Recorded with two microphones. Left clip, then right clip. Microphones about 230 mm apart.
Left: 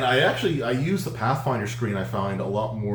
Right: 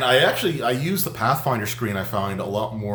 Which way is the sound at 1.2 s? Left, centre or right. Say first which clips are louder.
Right 4 dB; right.